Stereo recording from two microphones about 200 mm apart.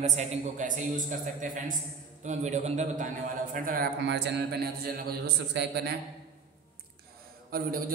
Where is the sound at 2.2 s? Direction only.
35° right (ahead or behind).